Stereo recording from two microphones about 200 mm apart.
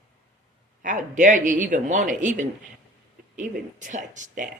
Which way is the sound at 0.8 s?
40° right (ahead or behind).